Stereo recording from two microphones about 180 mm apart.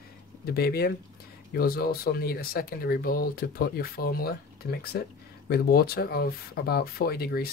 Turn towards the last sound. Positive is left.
turn(degrees=60)  # may be behind; listen again after turning